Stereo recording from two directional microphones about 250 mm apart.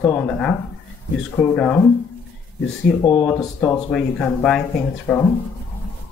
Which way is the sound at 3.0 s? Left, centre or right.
Centre.